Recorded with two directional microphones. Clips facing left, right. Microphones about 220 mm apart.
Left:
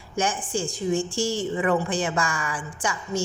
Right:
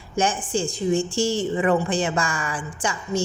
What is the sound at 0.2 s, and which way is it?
A woman's voice, 25° right (ahead or behind).